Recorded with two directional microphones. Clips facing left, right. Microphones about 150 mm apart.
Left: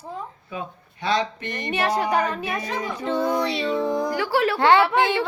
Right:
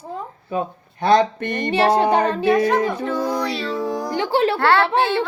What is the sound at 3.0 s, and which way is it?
Child singing, 25° left (ahead or behind).